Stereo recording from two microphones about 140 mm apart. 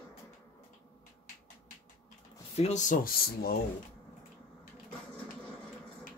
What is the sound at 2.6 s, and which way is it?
Speech, 60° left (ahead or behind).